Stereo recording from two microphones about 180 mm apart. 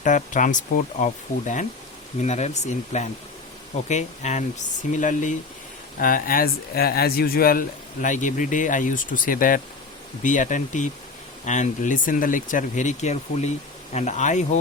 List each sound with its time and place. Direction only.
0.0 s speech: 45° left (ahead or behind)